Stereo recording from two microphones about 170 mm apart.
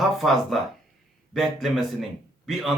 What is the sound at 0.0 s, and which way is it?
A man's voice, centre (ahead or behind).